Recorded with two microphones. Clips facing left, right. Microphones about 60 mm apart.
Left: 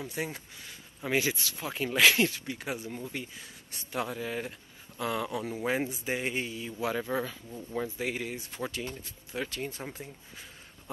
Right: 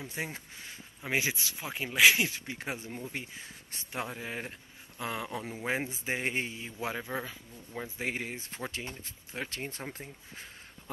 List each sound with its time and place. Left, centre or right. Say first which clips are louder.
0.1 s speech: left 2 dB; right
2.3 s speech: left 2 dB; right
7.0 s speech: left 5 dB; centre
8.0 s speech: left 2 dB; right